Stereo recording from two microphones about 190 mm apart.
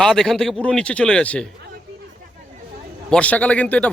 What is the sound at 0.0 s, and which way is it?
Speech, 5° left (ahead or behind).